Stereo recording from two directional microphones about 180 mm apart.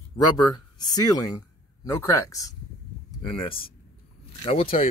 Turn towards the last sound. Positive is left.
turn(degrees=35)  # may be behind; listen again after turning